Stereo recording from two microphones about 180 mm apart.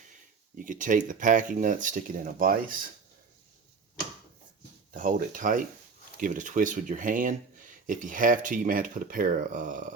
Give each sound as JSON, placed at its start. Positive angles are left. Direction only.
{"t": 0.5, "sound": "speech", "side_deg": -45}
{"t": 4.9, "sound": "speech", "side_deg": -45}